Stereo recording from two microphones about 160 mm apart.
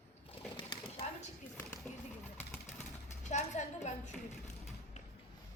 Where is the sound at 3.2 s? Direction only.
45° left (ahead or behind).